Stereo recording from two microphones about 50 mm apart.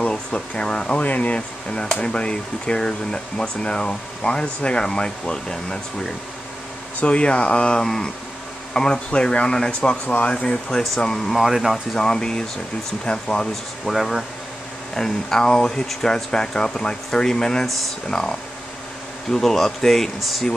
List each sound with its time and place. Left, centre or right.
0.1 s speech: centre
7.0 s speech: left
11.2 s speech: centre
12.0 s speech: centre
13.8 s speech: centre
15.0 s speech: centre
19.3 s speech: centre